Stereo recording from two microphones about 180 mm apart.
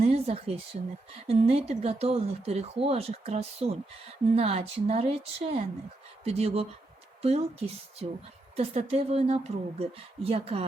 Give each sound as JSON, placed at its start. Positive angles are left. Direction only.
{"t": 0.0, "sound": "speech", "side_deg": -35}